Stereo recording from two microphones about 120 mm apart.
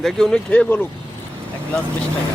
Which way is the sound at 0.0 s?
5° left (ahead or behind).